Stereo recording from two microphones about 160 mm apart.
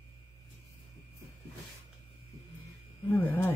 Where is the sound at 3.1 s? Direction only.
10° left (ahead or behind).